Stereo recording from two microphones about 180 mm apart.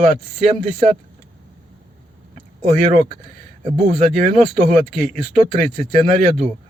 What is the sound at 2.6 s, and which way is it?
Speech, 40° right (ahead or behind).